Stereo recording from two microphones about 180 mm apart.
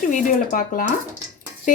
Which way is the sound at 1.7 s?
45° left (ahead or behind).